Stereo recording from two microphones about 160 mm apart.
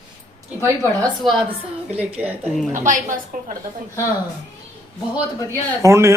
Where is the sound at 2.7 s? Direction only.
55° right (ahead or behind).